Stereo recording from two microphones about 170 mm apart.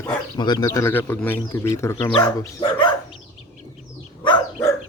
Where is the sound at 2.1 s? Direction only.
25° left (ahead or behind).